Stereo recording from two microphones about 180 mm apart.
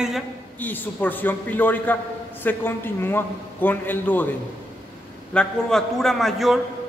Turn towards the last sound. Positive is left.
turn(degrees=0)  # may be behind; listen again after turning